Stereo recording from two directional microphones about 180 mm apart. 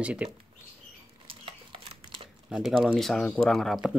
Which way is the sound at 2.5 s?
Centre (ahead or behind).